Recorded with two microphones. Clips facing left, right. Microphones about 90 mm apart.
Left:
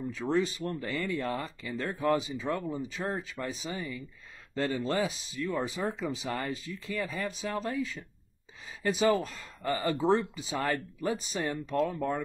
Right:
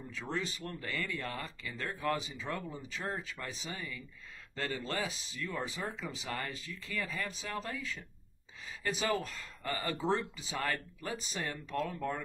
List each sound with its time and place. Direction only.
0.1 s speech: 20° left (ahead or behind)